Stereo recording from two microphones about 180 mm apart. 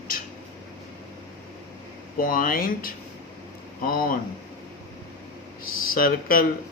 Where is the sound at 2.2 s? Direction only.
50° left (ahead or behind).